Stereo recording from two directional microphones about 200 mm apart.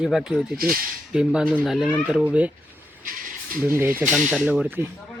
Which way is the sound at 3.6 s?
10° right (ahead or behind).